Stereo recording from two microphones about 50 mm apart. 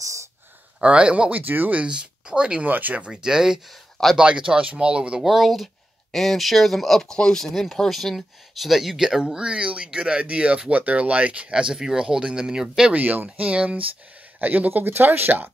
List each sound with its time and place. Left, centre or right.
0.7 s speech: right
1.3 s speech: right
1.9 s speech: centre
2.6 s speech: right
3.1 s speech: centre
3.6 s speech: centre
4.2 s speech: centre
5.2 s speech: centre
12.9 s speech: right